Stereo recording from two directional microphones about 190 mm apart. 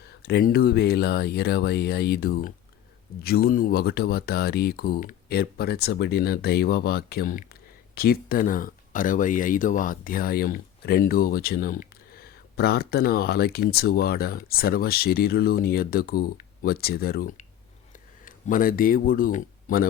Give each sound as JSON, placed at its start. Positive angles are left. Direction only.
{"t": 0.0, "sound": "speech", "side_deg": 55}